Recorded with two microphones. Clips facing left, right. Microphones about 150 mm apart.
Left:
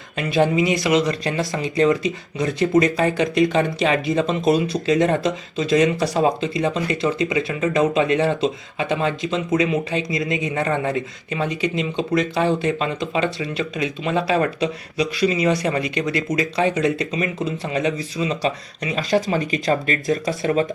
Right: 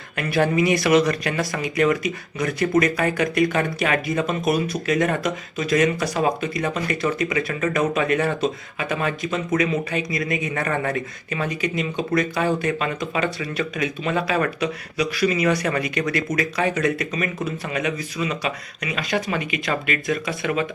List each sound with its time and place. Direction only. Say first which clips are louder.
0.2 s speech: left 2 dB; 20° left (ahead or behind); by 20.7 s 40° left (ahead or behind)